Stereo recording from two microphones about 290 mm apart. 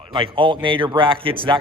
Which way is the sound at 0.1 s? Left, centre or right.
Centre.